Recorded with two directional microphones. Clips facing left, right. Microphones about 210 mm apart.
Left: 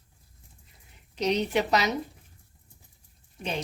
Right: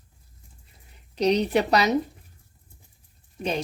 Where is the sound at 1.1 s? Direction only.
35° right (ahead or behind).